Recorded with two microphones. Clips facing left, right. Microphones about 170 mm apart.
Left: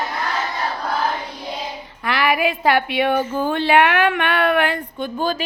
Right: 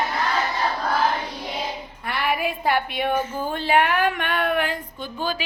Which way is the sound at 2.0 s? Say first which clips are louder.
Left 5 dB; 90° left.